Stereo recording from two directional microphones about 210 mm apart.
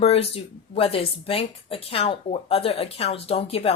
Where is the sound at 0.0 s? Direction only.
30° left (ahead or behind).